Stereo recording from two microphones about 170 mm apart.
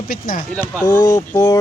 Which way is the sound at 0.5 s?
10° left (ahead or behind).